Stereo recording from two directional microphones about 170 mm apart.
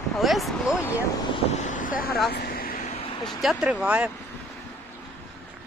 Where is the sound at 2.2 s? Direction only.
65° left (ahead or behind).